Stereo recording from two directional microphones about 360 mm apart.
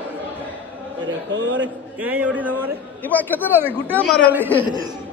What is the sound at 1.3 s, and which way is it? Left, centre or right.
Speech, right.